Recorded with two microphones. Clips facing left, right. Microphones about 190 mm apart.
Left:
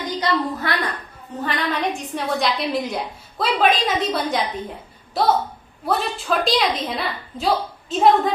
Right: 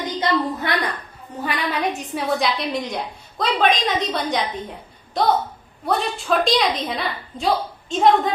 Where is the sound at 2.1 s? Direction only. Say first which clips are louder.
Right 1 dB; centre (ahead or behind).